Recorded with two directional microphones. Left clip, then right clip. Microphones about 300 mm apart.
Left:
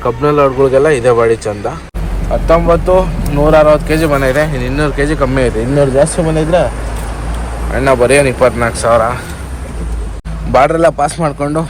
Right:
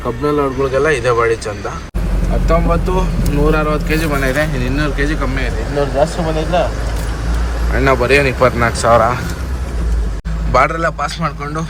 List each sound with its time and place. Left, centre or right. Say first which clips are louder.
0.0 s speech: left 6 dB; centre
6.1 s speech: left 5 dB; left
7.7 s speech: left 3 dB; centre
10.5 s speech: left 5 dB; centre